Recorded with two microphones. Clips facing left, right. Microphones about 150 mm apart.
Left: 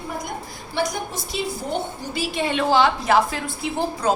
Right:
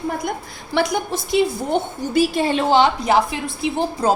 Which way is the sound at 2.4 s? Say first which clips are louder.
Right 4 dB; 35° right (ahead or behind).